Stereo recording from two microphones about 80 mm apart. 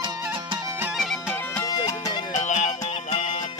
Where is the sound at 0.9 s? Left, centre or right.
Centre.